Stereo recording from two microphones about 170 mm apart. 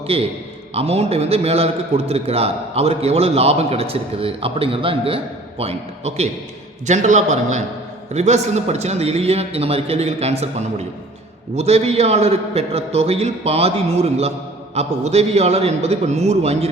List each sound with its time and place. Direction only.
0.1 s a man's voice: 35° right (ahead or behind)